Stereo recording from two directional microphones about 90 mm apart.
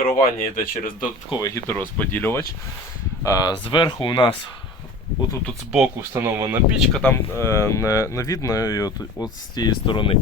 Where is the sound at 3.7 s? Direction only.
70° left (ahead or behind).